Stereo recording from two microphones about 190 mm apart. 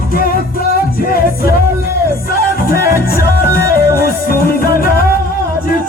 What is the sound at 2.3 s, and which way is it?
Music, 50° left (ahead or behind).